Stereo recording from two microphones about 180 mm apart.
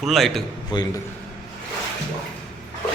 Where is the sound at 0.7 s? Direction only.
25° left (ahead or behind).